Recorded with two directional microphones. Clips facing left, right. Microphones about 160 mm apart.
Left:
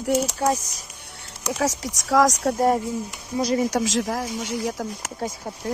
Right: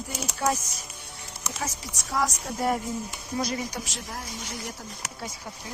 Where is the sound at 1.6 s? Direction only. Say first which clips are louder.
Left 11 dB; 90° left.